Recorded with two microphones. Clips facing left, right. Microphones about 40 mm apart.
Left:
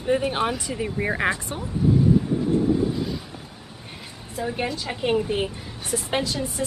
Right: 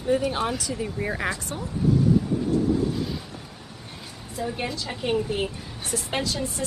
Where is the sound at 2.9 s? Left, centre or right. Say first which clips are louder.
Left 1 dB; centre.